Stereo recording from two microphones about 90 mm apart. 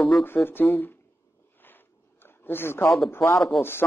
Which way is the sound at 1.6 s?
20° left (ahead or behind).